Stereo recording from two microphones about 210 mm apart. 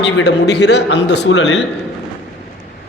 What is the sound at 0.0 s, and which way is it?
A man's voice, 55° left (ahead or behind).